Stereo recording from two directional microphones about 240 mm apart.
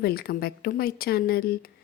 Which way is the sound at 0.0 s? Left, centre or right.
Left.